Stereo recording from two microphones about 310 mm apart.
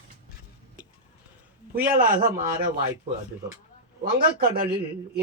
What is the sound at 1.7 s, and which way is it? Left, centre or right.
A man's voice, right.